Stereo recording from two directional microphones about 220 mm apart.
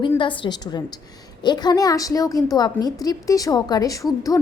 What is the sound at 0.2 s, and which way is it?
A woman's voice, 20° left (ahead or behind).